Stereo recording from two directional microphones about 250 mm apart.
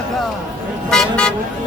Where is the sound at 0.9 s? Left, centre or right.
Centre.